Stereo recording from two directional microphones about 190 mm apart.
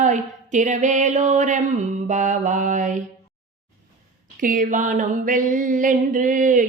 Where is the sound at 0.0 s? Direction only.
40° right (ahead or behind).